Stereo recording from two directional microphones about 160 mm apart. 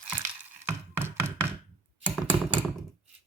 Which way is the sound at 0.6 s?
15° right (ahead or behind).